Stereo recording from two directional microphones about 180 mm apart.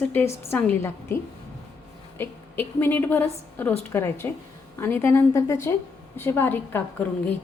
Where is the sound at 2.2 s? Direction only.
10° left (ahead or behind).